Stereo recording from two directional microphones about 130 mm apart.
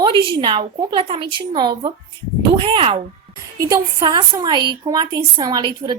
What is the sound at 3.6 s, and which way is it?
Speech, 30° right (ahead or behind).